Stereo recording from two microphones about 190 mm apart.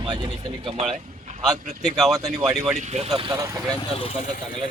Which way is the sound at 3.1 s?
20° right (ahead or behind).